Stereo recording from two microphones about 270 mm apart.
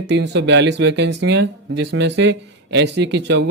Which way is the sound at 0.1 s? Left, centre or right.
Right.